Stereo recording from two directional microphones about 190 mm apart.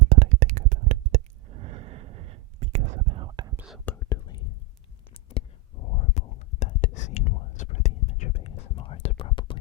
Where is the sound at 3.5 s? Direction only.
Centre (ahead or behind).